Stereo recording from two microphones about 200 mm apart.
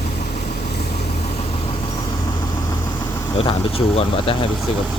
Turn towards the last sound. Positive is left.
turn(degrees=30)  # may be behind; listen again after turning